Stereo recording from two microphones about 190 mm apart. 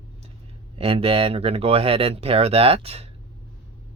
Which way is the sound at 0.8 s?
30° right (ahead or behind).